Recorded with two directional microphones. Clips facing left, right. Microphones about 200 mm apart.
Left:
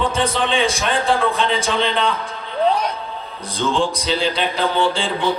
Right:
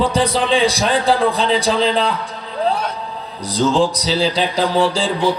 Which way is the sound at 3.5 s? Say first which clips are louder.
Right 4 dB; 40° right (ahead or behind).